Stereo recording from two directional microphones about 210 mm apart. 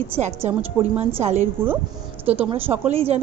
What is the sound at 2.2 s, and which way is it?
Speech, 10° right (ahead or behind).